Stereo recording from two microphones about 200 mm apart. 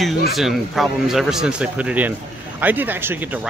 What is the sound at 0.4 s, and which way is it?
Speech, centre (ahead or behind).